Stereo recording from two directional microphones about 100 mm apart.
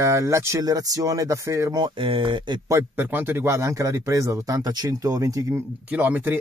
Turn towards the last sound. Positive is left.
turn(degrees=-15)  # may be behind; listen again after turning